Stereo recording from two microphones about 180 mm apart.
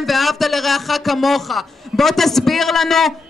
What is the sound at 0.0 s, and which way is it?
A man's voice, centre (ahead or behind).